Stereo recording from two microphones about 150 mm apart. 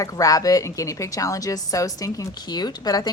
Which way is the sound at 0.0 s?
25° left (ahead or behind).